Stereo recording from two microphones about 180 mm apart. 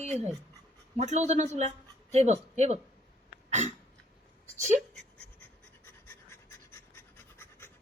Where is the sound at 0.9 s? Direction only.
40° right (ahead or behind).